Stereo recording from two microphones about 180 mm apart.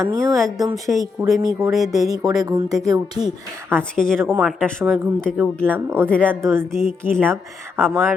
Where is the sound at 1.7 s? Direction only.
Centre (ahead or behind).